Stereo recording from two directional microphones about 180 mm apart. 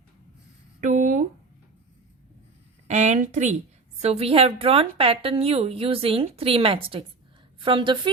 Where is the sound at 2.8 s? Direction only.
40° right (ahead or behind).